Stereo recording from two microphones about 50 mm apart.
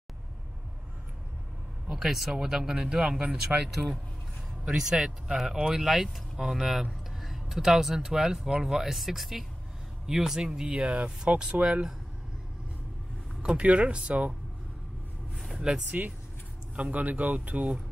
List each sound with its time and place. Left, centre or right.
1.9 s speech: centre
8.9 s speech: centre
13.4 s speech: right
15.3 s vehicle: centre
16.0 s speech: right